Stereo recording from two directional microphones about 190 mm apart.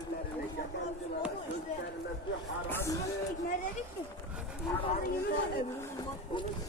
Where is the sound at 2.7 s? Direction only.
15° left (ahead or behind).